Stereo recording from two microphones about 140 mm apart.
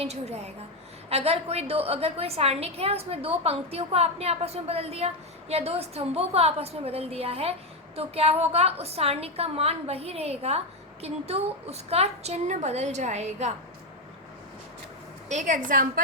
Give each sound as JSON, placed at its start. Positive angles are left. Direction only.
{"t": 0.0, "sound": "a woman's voice", "side_deg": -50}
{"t": 15.3, "sound": "a woman's voice", "side_deg": -60}